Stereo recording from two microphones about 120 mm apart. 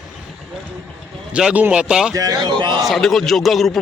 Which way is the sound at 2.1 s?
30° right (ahead or behind).